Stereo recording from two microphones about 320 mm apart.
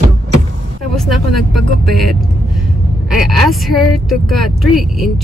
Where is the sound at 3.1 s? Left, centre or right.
Centre.